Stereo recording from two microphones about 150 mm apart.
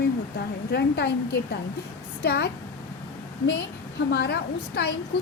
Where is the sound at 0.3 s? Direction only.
90° left.